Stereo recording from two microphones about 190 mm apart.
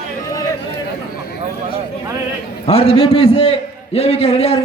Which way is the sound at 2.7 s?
30° left (ahead or behind).